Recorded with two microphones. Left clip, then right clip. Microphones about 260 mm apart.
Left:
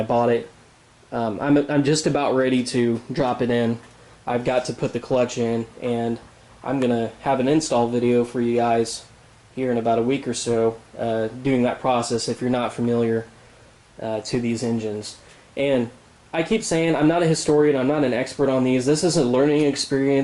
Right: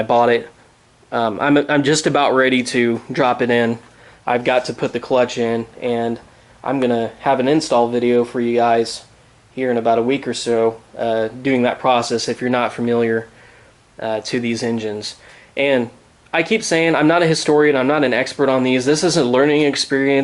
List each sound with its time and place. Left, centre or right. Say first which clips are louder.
0.0 s speech: right 6 dB; centre
14.6 s speech: right 4 dB; right
15.5 s speech: right 5 dB; centre